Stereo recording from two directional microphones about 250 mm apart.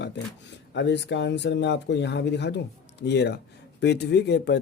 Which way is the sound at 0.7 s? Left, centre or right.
Left.